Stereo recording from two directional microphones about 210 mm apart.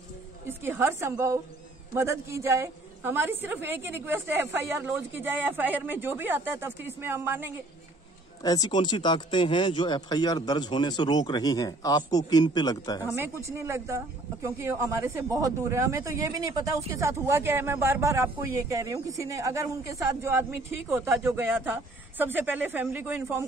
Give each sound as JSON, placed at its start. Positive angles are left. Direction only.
{"t": 0.5, "sound": "speech", "side_deg": -10}
{"t": 8.4, "sound": "speech", "side_deg": 20}
{"t": 13.1, "sound": "speech", "side_deg": -10}